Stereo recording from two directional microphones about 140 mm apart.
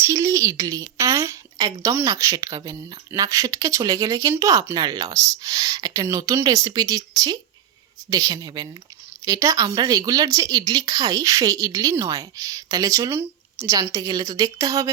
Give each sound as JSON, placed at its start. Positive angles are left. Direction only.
{"t": 0.0, "sound": "a woman's voice", "side_deg": -20}